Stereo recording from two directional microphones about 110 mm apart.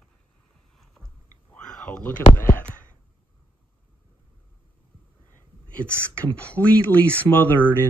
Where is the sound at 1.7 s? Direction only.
5° left (ahead or behind).